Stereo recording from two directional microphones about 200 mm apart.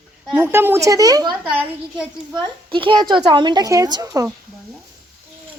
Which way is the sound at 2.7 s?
25° right (ahead or behind).